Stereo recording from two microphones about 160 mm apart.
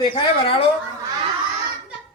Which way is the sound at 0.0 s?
35° left (ahead or behind).